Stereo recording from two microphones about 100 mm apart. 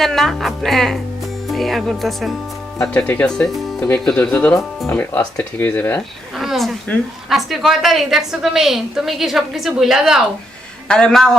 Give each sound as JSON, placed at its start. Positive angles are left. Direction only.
{"t": 0.0, "sound": "a woman's voice", "side_deg": 5}
{"t": 2.9, "sound": "speech", "side_deg": 15}
{"t": 6.3, "sound": "a woman's voice", "side_deg": 0}
{"t": 10.8, "sound": "speech", "side_deg": 10}